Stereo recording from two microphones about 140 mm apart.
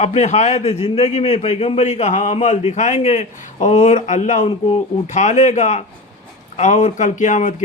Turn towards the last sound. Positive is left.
turn(degrees=60)  # may be behind; listen again after turning